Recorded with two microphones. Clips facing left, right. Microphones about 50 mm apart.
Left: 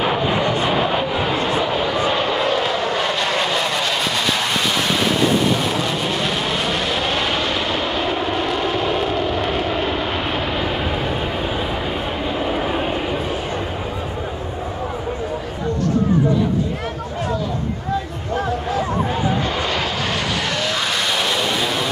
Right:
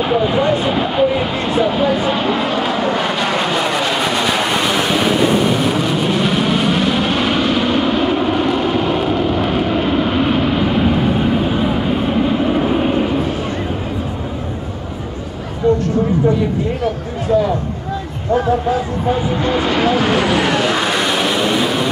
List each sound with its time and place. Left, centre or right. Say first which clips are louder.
0.0 s vehicle: right 3 dB; centre
0.6 s a sound: right 3 dB; centre
19.3 s vehicle: right 5 dB; centre